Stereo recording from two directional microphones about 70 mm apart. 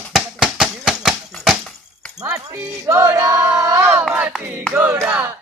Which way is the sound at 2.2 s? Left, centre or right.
Right.